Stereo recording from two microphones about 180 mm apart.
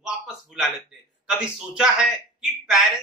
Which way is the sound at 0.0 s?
Centre (ahead or behind).